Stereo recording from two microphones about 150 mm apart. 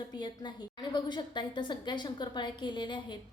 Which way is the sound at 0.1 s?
30° left (ahead or behind).